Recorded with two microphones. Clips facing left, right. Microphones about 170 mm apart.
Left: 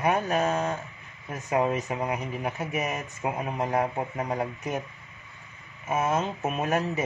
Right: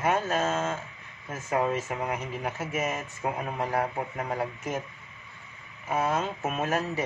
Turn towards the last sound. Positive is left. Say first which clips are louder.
# left 2 dB
turn(degrees=20)  # may be behind; listen again after turning